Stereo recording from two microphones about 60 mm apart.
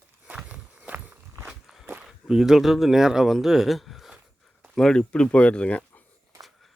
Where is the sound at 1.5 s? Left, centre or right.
Centre.